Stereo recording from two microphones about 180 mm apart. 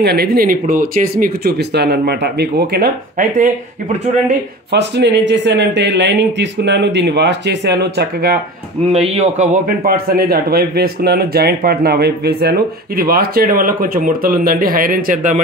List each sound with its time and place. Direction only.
0.0 s speech: 65° right (ahead or behind); by 3.5 s 45° right (ahead or behind)
4.7 s speech: 70° right (ahead or behind)
8.9 s speech: 35° right (ahead or behind)
9.7 s speech: 55° right (ahead or behind)